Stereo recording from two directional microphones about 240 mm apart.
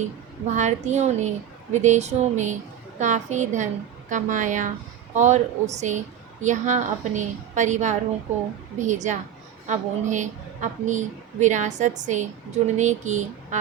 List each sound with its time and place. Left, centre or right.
0.5 s a woman's voice: right